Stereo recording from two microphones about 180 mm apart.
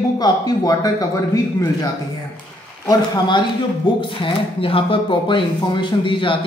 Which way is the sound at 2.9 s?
25° left (ahead or behind).